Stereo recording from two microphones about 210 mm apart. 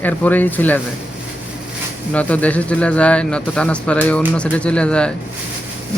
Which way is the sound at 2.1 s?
5° left (ahead or behind).